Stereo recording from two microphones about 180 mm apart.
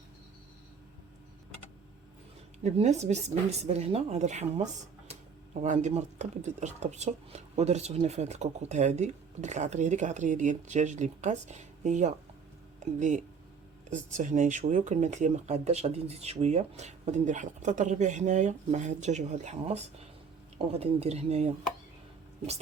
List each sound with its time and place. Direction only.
2.6 s speech: 40° right (ahead or behind)